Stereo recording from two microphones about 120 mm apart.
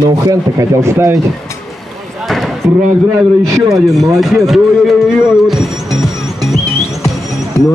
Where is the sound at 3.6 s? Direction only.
Centre (ahead or behind).